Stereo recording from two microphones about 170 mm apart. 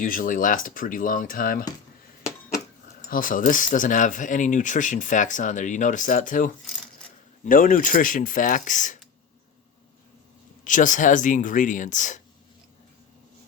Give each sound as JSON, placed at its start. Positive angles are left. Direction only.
{"t": 0.0, "sound": "speech", "side_deg": 55}
{"t": 3.1, "sound": "speech", "side_deg": 55}
{"t": 10.6, "sound": "speech", "side_deg": 50}